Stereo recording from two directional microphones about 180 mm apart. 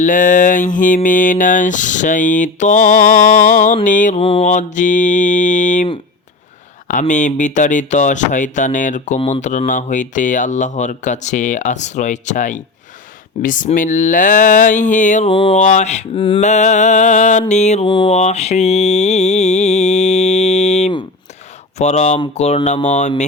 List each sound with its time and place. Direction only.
0.0 s speech: 45° left (ahead or behind)
4.2 s speech: 30° left (ahead or behind)
7.1 s speech: 45° left (ahead or behind)
15.3 s a sound: 30° left (ahead or behind)
15.6 s mantra: 40° left (ahead or behind)
16.4 s mantra: 40° left (ahead or behind)
17.8 s mantra: 30° left (ahead or behind)